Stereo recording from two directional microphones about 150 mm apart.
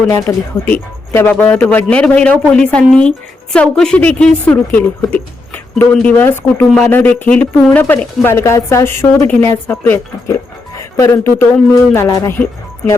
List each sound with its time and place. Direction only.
0.1 s a woman's voice: 15° left (ahead or behind)